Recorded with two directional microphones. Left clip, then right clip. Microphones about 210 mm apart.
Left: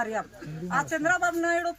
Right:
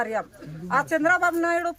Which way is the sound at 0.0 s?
15° right (ahead or behind).